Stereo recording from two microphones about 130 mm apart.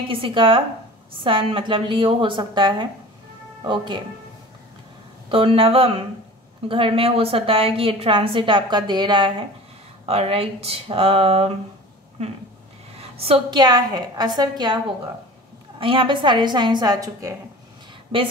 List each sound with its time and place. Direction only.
0.1 s a woman's voice: 45° right (ahead or behind)
5.3 s a woman's voice: 45° right (ahead or behind)
10.0 s a woman's voice: 50° right (ahead or behind)
12.9 s a sound: 50° right (ahead or behind)
13.6 s speech: 30° right (ahead or behind)
15.8 s speech: 40° right (ahead or behind); by 17.4 s 25° right (ahead or behind)
18.1 s a woman's voice: 45° right (ahead or behind)